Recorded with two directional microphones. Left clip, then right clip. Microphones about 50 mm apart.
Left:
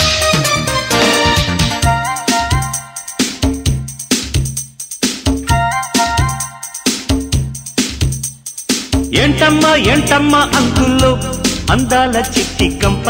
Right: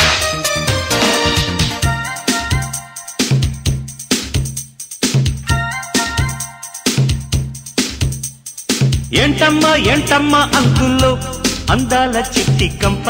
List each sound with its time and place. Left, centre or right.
0.0 s music: left
0.8 s music: left
1.8 s music: left
3.2 s music: left
4.1 s music: centre
5.2 s music: left
7.2 s music: left
8.1 s music: centre; by 10.1 s left
10.1 s music: centre
11.1 s music: left
12.1 s music: centre